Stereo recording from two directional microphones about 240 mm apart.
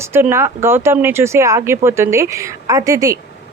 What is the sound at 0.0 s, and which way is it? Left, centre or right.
Speech, centre.